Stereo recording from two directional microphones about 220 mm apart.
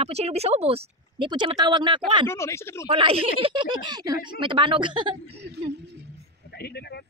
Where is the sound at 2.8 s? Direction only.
25° right (ahead or behind).